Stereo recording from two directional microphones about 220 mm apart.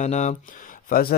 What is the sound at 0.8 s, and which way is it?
Speech, 40° left (ahead or behind).